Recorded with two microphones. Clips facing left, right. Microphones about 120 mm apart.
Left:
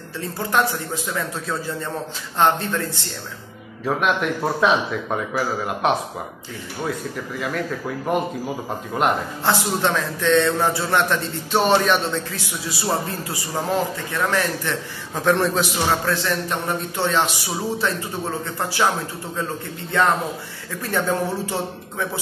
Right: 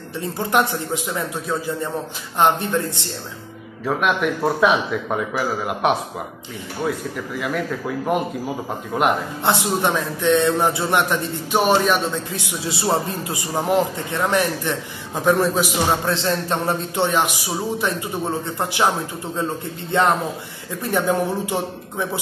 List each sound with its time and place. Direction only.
0.4 s a man's voice: 20° right (ahead or behind)
3.8 s a man's voice: centre (ahead or behind)
7.3 s a man's voice: 5° right (ahead or behind)
9.4 s a man's voice: 20° right (ahead or behind)
12.3 s a man's voice: 20° right (ahead or behind)
16.1 s a man's voice: 25° right (ahead or behind)
19.9 s a man's voice: 20° right (ahead or behind)